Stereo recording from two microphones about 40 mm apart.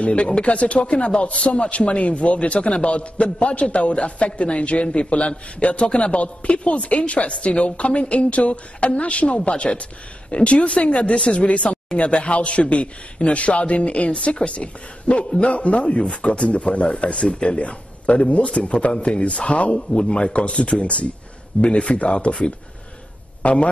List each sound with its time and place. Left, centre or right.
0.0 s a man's voice: left
11.4 s a man's voice: left
23.4 s a man's voice: left